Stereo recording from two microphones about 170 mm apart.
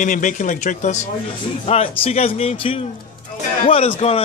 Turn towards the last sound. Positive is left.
turn(degrees=35)  # may be behind; listen again after turning